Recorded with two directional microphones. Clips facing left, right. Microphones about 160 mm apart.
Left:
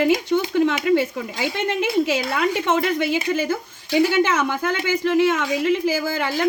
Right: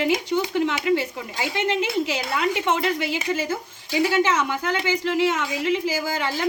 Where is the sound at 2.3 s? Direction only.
50° left (ahead or behind).